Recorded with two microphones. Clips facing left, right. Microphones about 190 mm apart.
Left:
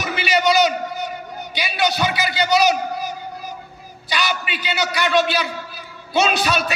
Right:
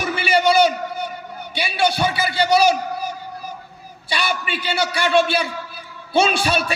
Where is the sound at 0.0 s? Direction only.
30° right (ahead or behind).